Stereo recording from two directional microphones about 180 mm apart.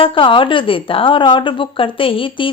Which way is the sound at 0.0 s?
30° left (ahead or behind).